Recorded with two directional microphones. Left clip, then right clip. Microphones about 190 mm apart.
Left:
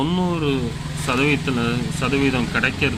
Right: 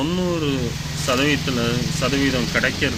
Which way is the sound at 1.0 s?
55° left (ahead or behind).